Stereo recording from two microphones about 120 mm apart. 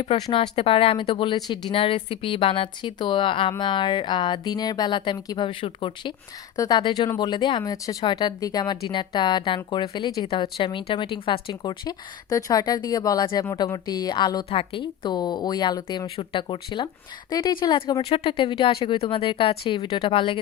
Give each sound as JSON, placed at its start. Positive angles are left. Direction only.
{"t": 0.2, "sound": "a woman's voice", "side_deg": 40}
{"t": 1.7, "sound": "a woman's voice", "side_deg": 50}
{"t": 14.5, "sound": "speech", "side_deg": 50}
{"t": 18.0, "sound": "a woman's voice", "side_deg": 55}